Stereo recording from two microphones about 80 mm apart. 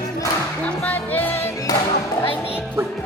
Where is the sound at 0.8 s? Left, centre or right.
Left.